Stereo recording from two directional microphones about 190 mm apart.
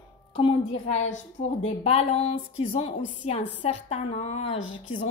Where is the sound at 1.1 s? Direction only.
40° left (ahead or behind).